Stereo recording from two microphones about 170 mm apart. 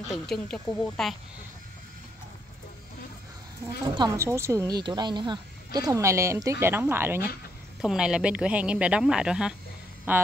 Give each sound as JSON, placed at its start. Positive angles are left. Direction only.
{"t": 0.1, "sound": "speech", "side_deg": 5}
{"t": 3.8, "sound": "speech", "side_deg": -25}